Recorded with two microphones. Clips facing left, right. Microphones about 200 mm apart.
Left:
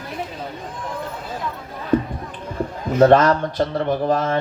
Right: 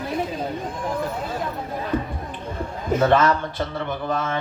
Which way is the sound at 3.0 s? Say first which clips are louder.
Left 6 dB; 35° left (ahead or behind).